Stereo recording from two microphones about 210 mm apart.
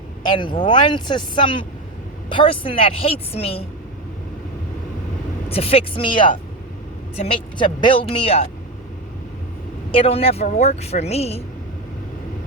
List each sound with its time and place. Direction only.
0.2 s speech: 20° left (ahead or behind)
5.5 s speech: 25° left (ahead or behind)
9.9 s speech: 25° left (ahead or behind)